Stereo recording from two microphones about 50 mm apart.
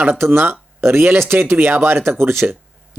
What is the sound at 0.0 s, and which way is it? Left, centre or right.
Speech, right.